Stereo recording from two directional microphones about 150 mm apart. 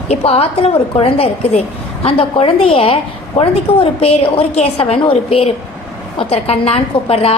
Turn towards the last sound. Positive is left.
turn(degrees=40)  # may be behind; listen again after turning